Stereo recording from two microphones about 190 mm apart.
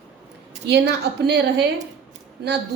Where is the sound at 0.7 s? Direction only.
60° right (ahead or behind).